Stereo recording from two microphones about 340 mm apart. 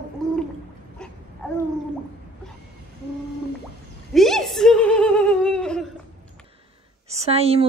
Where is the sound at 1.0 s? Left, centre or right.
Centre.